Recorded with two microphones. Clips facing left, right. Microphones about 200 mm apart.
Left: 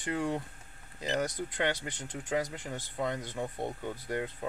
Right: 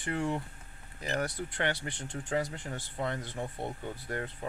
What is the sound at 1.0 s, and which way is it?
Speech, 20° left (ahead or behind).